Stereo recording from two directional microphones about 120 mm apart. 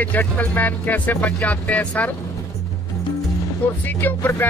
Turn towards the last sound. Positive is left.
turn(degrees=15)  # may be behind; listen again after turning